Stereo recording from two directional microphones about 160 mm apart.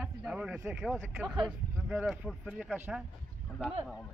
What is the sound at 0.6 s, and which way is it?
Speech, 10° right (ahead or behind).